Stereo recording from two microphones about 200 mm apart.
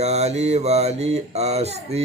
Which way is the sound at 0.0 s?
35° right (ahead or behind).